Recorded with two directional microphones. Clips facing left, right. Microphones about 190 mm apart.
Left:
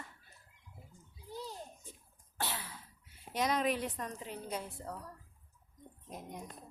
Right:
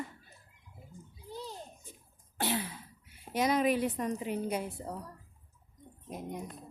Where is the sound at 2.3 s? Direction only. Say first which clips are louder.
Right 8 dB; 15° right (ahead or behind).